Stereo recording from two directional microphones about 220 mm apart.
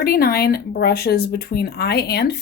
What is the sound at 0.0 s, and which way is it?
Speech, 45° left (ahead or behind).